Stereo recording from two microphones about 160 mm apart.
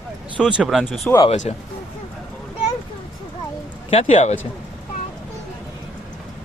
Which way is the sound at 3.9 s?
40° left (ahead or behind).